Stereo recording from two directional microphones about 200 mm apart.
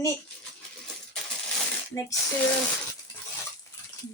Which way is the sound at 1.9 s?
15° left (ahead or behind).